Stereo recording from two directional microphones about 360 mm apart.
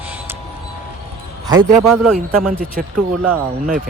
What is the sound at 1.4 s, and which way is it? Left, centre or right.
Speech, centre.